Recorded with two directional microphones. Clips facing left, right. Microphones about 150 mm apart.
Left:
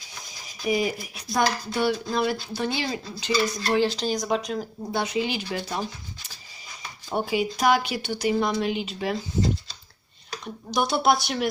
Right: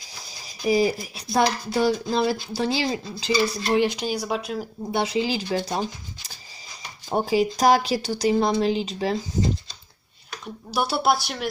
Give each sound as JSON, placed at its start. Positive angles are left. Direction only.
{"t": 0.7, "sound": "speech", "side_deg": -35}
{"t": 3.7, "sound": "speech", "side_deg": -15}
{"t": 4.9, "sound": "speech", "side_deg": -25}
{"t": 7.1, "sound": "speech", "side_deg": -35}
{"t": 10.4, "sound": "speech", "side_deg": -5}